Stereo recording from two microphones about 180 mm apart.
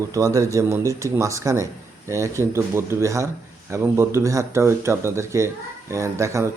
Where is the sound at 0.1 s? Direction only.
15° right (ahead or behind).